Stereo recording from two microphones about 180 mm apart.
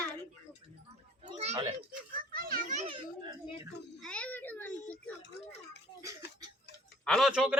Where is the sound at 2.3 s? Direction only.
55° right (ahead or behind).